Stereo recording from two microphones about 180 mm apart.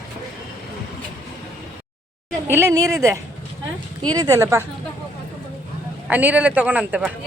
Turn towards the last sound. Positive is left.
turn(degrees=-5)  # may be behind; listen again after turning